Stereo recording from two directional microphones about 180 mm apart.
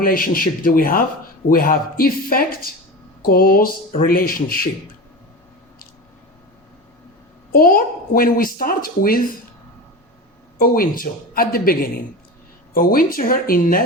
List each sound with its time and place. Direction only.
0.0 s a woman's voice: 55° left (ahead or behind)
7.5 s a woman's voice: 55° left (ahead or behind)
10.6 s a woman's voice: 50° left (ahead or behind)